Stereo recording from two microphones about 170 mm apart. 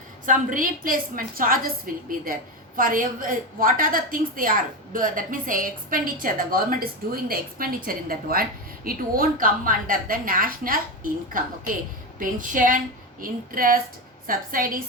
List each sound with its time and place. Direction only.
0.3 s a woman's voice: 55° right (ahead or behind)